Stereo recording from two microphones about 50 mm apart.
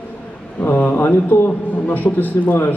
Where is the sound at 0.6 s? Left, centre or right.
Left.